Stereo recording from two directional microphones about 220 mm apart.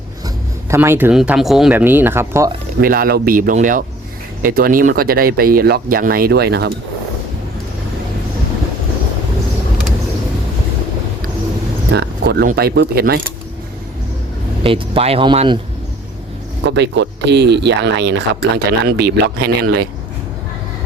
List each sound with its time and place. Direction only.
0.7 s speech: 10° right (ahead or behind)
2.8 s speech: 40° right (ahead or behind)
11.9 s speech: 50° right (ahead or behind)
14.6 s speech: 25° right (ahead or behind)
16.6 s speech: 50° right (ahead or behind)